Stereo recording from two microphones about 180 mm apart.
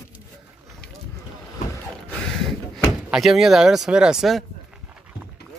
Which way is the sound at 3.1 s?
Centre (ahead or behind).